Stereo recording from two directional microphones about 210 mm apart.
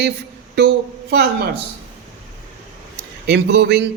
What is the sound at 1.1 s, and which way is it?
Speech, 50° right (ahead or behind).